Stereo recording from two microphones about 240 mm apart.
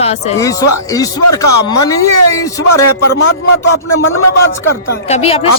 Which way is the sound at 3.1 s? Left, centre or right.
Left.